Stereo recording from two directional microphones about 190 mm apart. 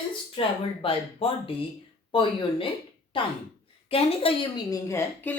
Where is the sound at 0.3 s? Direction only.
30° left (ahead or behind).